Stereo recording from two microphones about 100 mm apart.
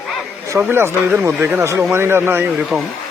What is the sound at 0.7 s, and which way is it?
Speech, 25° right (ahead or behind).